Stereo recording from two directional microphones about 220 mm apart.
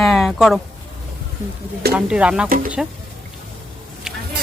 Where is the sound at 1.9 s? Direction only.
5° right (ahead or behind).